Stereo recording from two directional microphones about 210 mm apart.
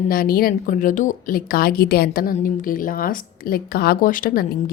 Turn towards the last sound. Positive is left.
turn(degrees=40)  # may be behind; listen again after turning